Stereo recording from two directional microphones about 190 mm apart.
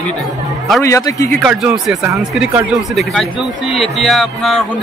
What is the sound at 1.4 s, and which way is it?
Speech, centre (ahead or behind).